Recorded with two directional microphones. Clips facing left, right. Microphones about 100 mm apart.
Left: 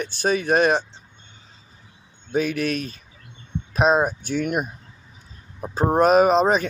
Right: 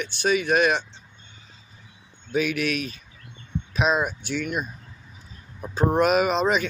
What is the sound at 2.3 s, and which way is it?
Speech, 35° left (ahead or behind).